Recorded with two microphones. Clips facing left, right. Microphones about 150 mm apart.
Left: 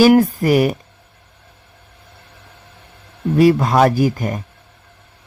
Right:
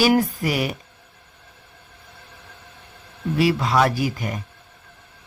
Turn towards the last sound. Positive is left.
turn(degrees=45)  # may be behind; listen again after turning